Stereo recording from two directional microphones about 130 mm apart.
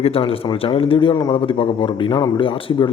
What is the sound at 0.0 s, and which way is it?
A man's voice, 45° left (ahead or behind).